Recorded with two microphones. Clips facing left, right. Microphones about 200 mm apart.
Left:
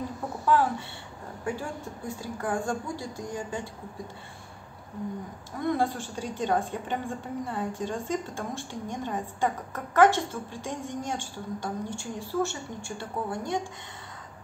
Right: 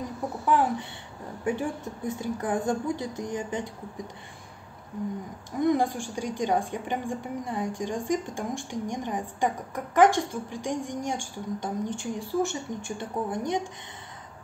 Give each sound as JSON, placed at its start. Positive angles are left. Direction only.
{"t": 0.5, "sound": "a woman's voice", "side_deg": -15}
{"t": 5.6, "sound": "a woman's voice", "side_deg": -15}